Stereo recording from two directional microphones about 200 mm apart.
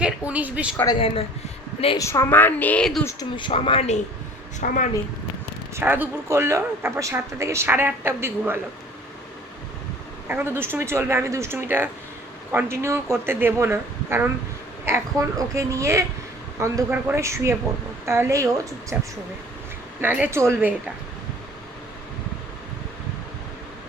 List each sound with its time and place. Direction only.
0.0 s speech: 5° right (ahead or behind)
0.9 s speech: 30° left (ahead or behind)
2.0 s a woman's voice: 15° left (ahead or behind)
3.1 s speech: 20° left (ahead or behind); by 4.9 s 40° left (ahead or behind)
5.7 s a man's voice: 10° right (ahead or behind)
10.2 s a man's voice: 10° right (ahead or behind)
20.0 s a man's voice: 10° right (ahead or behind)